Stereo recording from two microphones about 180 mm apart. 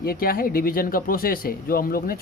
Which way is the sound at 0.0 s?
55° left (ahead or behind).